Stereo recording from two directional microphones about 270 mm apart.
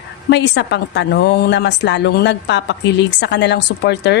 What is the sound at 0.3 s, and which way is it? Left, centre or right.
A woman's voice, left.